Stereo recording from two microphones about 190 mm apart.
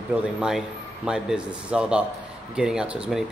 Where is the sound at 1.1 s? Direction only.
5° right (ahead or behind).